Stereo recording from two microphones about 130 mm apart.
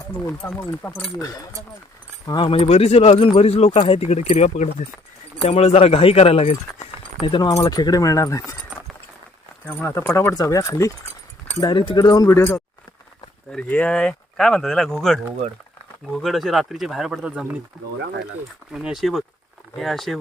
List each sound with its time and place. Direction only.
0.4 s speech: 15° left (ahead or behind)
1.2 s speech: 25° left (ahead or behind); by 4.9 s 60° left (ahead or behind)
5.4 s speech: 50° left (ahead or behind)
7.2 s speech: 40° left (ahead or behind)
7.5 s speech: 25° left (ahead or behind)
9.7 s speech: 20° left (ahead or behind)
11.6 s speech: 40° left (ahead or behind)
13.5 s speech: 10° left (ahead or behind); by 17.6 s 5° right (ahead or behind)
18.7 s speech: 5° right (ahead or behind)